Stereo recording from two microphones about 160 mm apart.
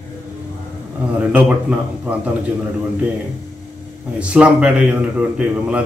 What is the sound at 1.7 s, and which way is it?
Speech, 5° right (ahead or behind).